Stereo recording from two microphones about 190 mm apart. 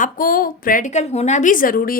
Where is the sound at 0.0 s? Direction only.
45° left (ahead or behind).